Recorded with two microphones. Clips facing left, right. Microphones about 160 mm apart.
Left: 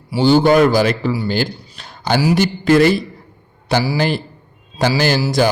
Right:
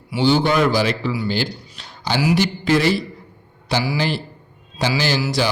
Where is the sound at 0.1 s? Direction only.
45° left (ahead or behind).